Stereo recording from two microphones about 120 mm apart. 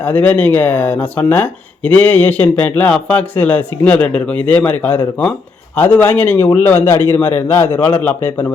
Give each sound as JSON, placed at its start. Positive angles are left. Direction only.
{"t": 0.0, "sound": "a man's voice", "side_deg": 15}